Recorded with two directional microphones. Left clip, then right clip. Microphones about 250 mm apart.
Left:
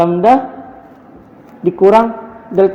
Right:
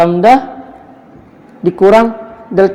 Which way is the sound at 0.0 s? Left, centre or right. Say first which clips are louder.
Right 3 dB; right.